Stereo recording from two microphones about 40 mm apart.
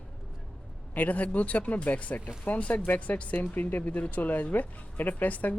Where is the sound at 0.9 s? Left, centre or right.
Left.